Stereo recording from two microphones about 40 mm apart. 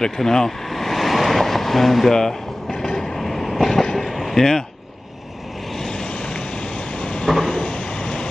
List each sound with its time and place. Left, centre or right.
0.0 s vehicle: centre
5.8 s vehicle: centre
7.4 s a sound: left